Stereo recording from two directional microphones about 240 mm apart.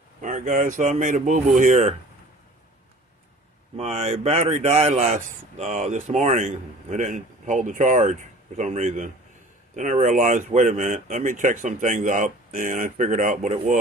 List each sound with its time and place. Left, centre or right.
0.2 s speech: right
3.7 s speech: right